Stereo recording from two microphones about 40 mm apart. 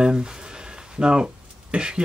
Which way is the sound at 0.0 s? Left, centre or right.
Right.